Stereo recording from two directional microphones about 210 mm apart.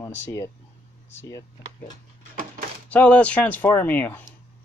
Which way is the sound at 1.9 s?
40° right (ahead or behind).